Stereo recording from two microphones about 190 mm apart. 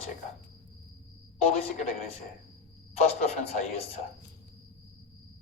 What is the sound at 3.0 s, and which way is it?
Speech, 35° left (ahead or behind).